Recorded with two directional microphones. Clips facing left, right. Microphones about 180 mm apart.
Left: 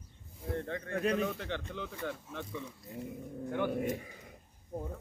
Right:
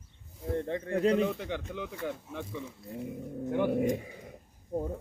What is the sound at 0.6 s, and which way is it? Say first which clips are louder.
Speech: right 6 dB; 25° right (ahead or behind).